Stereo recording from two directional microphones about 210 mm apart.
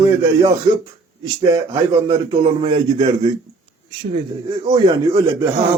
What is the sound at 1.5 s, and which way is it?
A man's voice, 15° right (ahead or behind).